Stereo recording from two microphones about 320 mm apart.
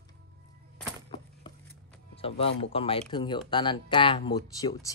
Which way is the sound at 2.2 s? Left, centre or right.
Centre.